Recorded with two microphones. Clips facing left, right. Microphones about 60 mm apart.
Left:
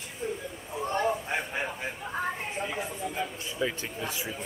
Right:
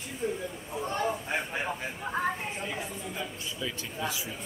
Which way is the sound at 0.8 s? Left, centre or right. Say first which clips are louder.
Left 3 dB; centre.